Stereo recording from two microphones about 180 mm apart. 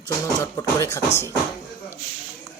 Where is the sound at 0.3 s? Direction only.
20° left (ahead or behind).